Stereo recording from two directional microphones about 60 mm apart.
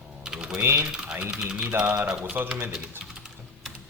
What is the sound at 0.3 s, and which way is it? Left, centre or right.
Typing, centre.